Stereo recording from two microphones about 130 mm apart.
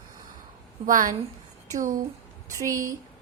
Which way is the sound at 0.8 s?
90° right.